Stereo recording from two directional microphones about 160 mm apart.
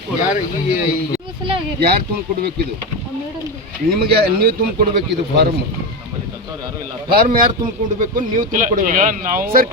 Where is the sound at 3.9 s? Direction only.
80° right.